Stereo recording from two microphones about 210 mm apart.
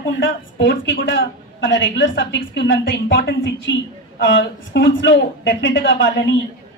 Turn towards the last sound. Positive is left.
turn(degrees=60)  # may be behind; listen again after turning